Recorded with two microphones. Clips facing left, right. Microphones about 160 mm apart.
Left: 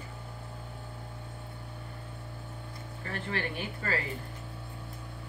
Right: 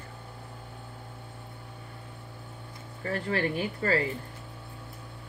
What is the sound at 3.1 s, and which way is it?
Speech, 35° right (ahead or behind).